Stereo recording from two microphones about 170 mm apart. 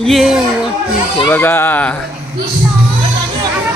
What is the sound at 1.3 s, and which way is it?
Speech, 10° left (ahead or behind).